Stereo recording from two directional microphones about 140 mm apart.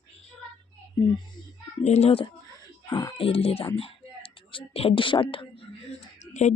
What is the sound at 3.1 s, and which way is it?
Speech, 40° left (ahead or behind).